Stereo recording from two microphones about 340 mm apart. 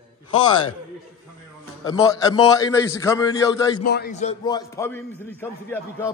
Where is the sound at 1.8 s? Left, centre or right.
Centre.